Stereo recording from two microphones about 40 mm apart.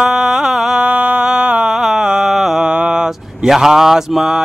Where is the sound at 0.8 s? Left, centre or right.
Right.